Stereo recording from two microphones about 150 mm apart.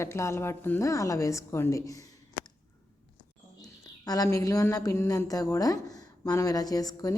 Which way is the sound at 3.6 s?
25° left (ahead or behind).